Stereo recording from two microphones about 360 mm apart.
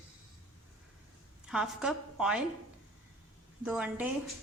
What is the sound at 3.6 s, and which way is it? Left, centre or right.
Speech, centre.